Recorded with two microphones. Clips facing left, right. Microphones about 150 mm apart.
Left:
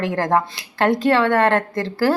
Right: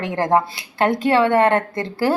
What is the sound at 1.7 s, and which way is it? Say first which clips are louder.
Speech: left 1 dB; 25° right (ahead or behind).